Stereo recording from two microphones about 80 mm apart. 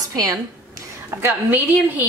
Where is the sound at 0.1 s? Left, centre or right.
Right.